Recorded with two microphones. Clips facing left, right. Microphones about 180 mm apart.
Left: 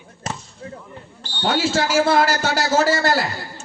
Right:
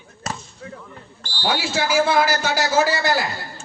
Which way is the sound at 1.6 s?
40° left (ahead or behind).